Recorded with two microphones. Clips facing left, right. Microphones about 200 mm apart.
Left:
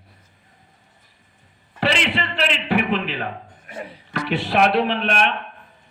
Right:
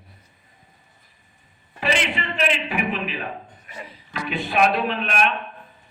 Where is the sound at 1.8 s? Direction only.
90° left.